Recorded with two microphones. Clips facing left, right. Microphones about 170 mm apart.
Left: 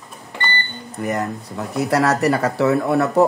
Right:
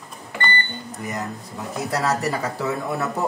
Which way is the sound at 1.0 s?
60° left (ahead or behind).